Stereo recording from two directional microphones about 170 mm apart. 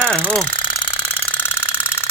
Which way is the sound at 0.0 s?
Centre (ahead or behind).